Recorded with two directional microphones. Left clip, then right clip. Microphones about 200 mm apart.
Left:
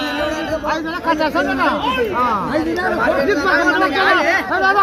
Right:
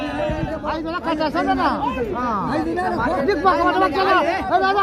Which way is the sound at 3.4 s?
5° right (ahead or behind).